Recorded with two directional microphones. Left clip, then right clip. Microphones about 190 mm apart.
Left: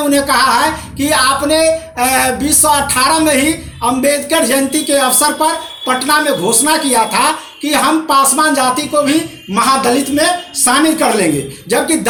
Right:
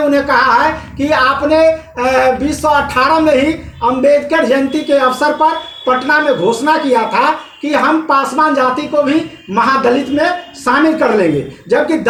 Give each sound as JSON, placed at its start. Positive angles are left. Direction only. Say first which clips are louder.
{"t": 0.3, "sound": "a woman's voice", "louder": "right 1 dB", "side_deg": 20}